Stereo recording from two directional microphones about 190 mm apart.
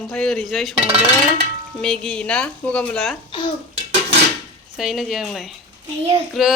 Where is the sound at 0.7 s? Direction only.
30° right (ahead or behind).